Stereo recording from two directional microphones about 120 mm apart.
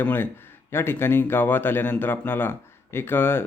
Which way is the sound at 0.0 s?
20° left (ahead or behind).